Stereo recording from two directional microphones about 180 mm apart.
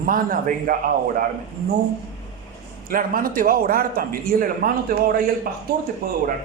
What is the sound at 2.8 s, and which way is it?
A man's voice, 50° right (ahead or behind).